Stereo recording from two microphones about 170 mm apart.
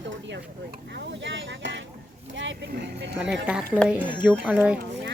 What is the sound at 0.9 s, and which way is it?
Speech, 90° right.